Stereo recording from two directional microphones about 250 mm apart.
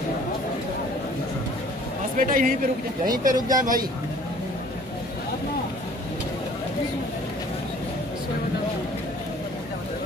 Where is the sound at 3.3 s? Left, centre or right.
Centre.